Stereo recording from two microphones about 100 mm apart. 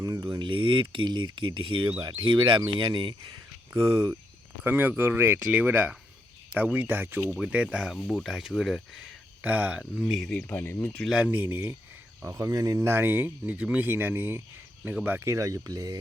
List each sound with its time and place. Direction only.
0.0 s speech: 35° right (ahead or behind); by 3.2 s 60° right (ahead or behind)
3.7 s speech: 25° right (ahead or behind)
7.3 s speech: 10° right (ahead or behind)
9.4 s speech: 15° right (ahead or behind)
9.9 s speech: centre (ahead or behind)
10.5 s speech: 20° left (ahead or behind)
11.1 s speech: 15° right (ahead or behind)
12.4 s speech: 35° right (ahead or behind)
12.9 s speech: 20° right (ahead or behind); by 16.0 s 40° right (ahead or behind)